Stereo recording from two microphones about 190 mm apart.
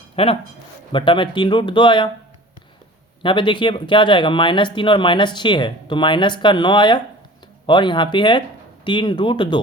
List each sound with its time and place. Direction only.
0.2 s speech: 30° left (ahead or behind)
3.2 s speech: 25° left (ahead or behind)